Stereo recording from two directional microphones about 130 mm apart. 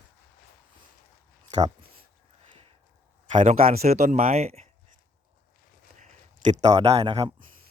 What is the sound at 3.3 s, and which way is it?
Speech, 75° right (ahead or behind).